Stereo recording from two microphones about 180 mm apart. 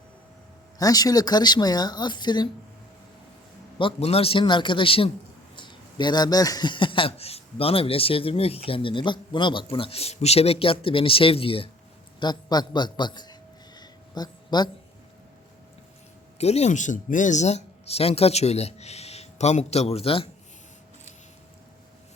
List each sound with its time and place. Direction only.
0.8 s a woman's voice: 20° left (ahead or behind)
3.8 s a woman's voice: 30° left (ahead or behind)
13.7 s a sound: 25° left (ahead or behind)
16.4 s speech: 35° left (ahead or behind)